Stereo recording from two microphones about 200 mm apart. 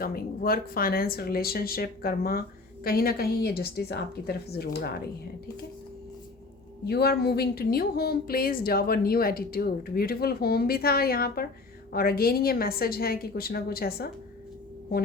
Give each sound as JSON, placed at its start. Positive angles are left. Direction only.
{"t": 0.0, "sound": "speech", "side_deg": 50}
{"t": 6.8, "sound": "speech", "side_deg": 50}